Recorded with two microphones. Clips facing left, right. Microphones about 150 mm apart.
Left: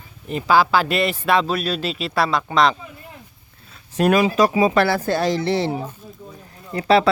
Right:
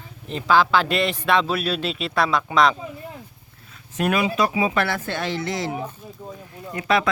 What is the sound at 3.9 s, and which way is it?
Speech, 35° left (ahead or behind).